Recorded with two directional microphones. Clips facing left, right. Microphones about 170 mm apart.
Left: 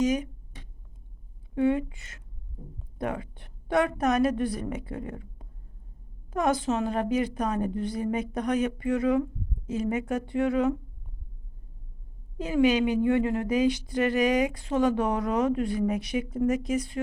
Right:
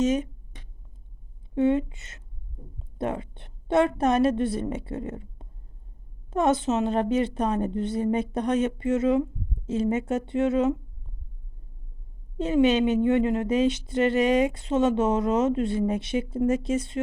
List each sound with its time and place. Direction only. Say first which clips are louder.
0.0 s speech: right 2 dB; 25° right (ahead or behind)
1.5 s a woman's voice: right 2 dB; 25° right (ahead or behind)
12.4 s a woman's voice: right 2 dB; 25° right (ahead or behind)